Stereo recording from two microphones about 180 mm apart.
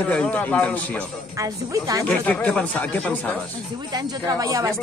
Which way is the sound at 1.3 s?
20° right (ahead or behind).